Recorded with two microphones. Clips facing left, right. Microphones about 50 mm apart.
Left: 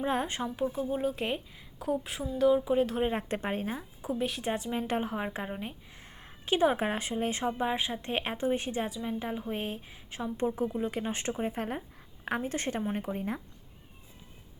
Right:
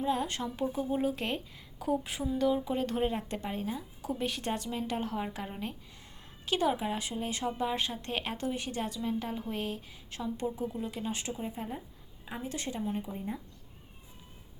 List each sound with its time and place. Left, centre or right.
0.0 s speech: left
0.3 s speech: left
0.5 s speech: centre
3.1 s speech: left
4.2 s speech: centre
4.7 s speech: left
5.5 s speech: centre
5.9 s a sound: left
6.7 s speech: left
8.9 s speech: centre; by 11.8 s left
12.4 s speech: left
13.1 s speech: left